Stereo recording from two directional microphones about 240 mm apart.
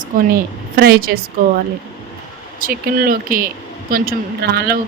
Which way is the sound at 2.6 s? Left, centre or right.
Right.